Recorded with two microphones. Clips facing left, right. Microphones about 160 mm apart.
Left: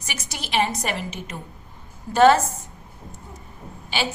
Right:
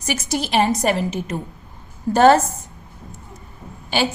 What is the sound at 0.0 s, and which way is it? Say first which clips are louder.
A woman's voice: right 12 dB; 40° right (ahead or behind).